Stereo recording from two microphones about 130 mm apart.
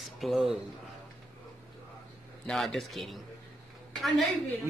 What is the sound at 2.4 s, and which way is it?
Speech, 5° left (ahead or behind).